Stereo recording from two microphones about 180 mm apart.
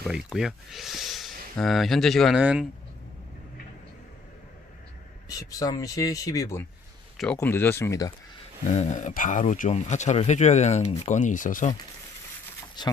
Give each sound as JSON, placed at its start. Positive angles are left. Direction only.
{"t": 0.1, "sound": "speech", "side_deg": -5}
{"t": 5.3, "sound": "speech", "side_deg": 20}
{"t": 8.7, "sound": "speech", "side_deg": 40}
{"t": 12.8, "sound": "speech", "side_deg": 25}